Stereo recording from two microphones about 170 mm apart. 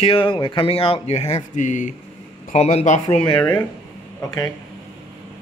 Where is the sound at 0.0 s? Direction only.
30° left (ahead or behind).